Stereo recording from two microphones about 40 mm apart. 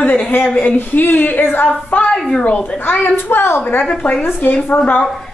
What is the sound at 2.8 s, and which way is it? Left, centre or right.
Speech, left.